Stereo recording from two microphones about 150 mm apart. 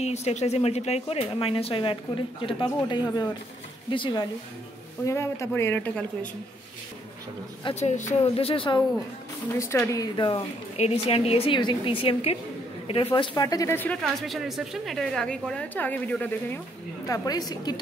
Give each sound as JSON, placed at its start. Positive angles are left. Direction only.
{"t": 0.0, "sound": "a woman's voice", "side_deg": 45}
{"t": 5.0, "sound": "a man's voice", "side_deg": 20}
{"t": 7.8, "sound": "a woman's voice", "side_deg": 50}
{"t": 9.6, "sound": "speech", "side_deg": 20}
{"t": 10.8, "sound": "a woman's voice", "side_deg": 40}
{"t": 14.0, "sound": "a woman's voice", "side_deg": 0}
{"t": 17.1, "sound": "speech", "side_deg": 25}